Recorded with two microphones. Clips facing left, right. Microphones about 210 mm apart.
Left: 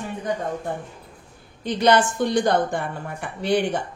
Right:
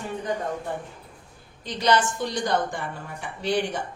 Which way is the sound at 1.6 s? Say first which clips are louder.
Left 4 dB; 55° left (ahead or behind).